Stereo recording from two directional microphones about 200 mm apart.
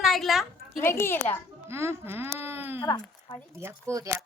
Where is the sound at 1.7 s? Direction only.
15° right (ahead or behind).